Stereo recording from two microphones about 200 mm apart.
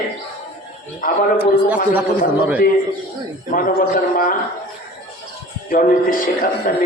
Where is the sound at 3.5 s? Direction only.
45° left (ahead or behind).